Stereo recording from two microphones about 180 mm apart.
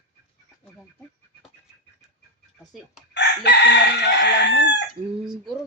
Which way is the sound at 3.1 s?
70° left (ahead or behind).